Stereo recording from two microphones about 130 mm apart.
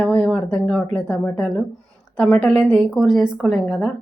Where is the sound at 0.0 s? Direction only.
5° left (ahead or behind).